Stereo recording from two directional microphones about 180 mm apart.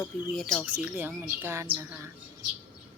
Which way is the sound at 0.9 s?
10° right (ahead or behind).